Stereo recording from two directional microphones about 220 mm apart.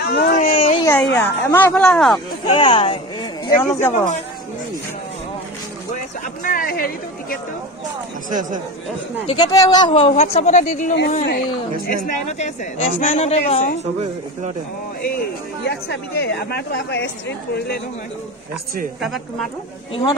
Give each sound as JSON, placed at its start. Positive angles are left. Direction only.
{"t": 0.0, "sound": "baby cry", "side_deg": 45}
{"t": 0.5, "sound": "baby cry", "side_deg": 30}
{"t": 0.8, "sound": "speech", "side_deg": 10}
{"t": 2.1, "sound": "speech", "side_deg": 20}
{"t": 3.8, "sound": "speech", "side_deg": 35}
{"t": 6.4, "sound": "speech", "side_deg": 40}
{"t": 8.3, "sound": "speech", "side_deg": -35}
{"t": 9.3, "sound": "speech", "side_deg": 15}
{"t": 11.2, "sound": "speech", "side_deg": 45}
{"t": 12.0, "sound": "speech", "side_deg": 35}
{"t": 15.6, "sound": "speech", "side_deg": 50}
{"t": 18.9, "sound": "a woman's voice", "side_deg": 0}
{"t": 19.9, "sound": "speech", "side_deg": 25}